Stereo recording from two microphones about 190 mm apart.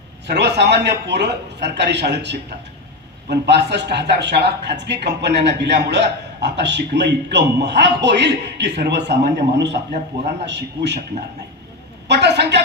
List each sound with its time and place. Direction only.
0.3 s a man's voice: 65° right (ahead or behind)
12.0 s a woman's voice: 65° right (ahead or behind)